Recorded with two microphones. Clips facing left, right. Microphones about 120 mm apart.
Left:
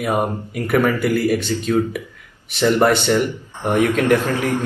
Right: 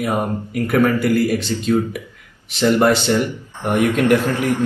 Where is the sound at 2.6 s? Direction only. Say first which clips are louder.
Even; 15° right (ahead or behind).